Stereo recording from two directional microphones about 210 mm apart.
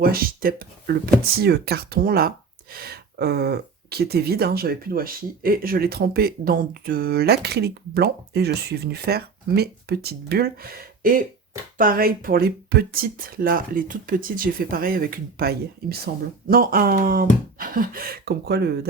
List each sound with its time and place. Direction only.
0.0 s speech: 45° right (ahead or behind)